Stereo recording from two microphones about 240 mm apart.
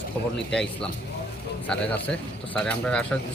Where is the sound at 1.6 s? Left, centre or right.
Centre.